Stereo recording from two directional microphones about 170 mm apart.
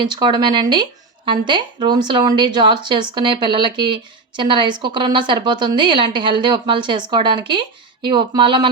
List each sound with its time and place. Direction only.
0.0 s speech: 25° right (ahead or behind)